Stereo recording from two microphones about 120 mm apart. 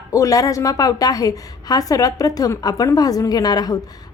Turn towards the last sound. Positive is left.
turn(degrees=35)  # may be behind; listen again after turning